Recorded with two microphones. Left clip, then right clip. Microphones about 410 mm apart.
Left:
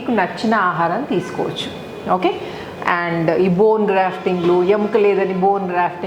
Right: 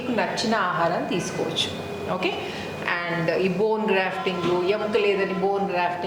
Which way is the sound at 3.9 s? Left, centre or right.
Left.